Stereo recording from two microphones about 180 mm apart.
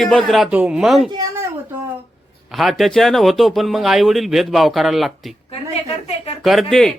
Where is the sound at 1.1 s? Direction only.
20° right (ahead or behind).